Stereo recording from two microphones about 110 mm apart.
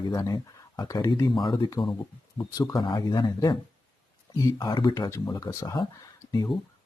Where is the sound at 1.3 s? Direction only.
45° left (ahead or behind).